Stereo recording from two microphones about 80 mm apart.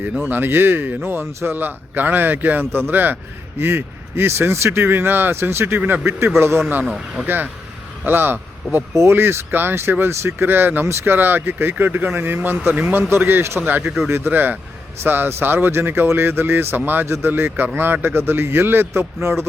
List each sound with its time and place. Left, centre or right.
0.3 s speech: right
6.9 s speech: centre
7.3 s speech: right